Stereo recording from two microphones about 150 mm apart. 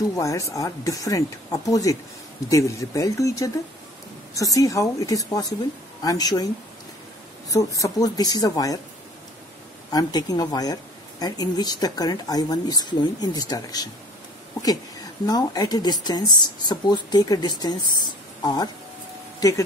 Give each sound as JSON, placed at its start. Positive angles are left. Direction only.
{"t": 0.1, "sound": "speech", "side_deg": 20}
{"t": 7.4, "sound": "speech", "side_deg": 20}
{"t": 9.8, "sound": "speech", "side_deg": 25}
{"t": 15.2, "sound": "speech", "side_deg": 25}